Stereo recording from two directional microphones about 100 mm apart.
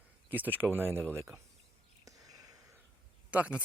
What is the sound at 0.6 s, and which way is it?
Speech, 20° right (ahead or behind).